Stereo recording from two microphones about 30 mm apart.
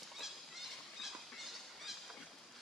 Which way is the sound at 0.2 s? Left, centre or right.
Centre.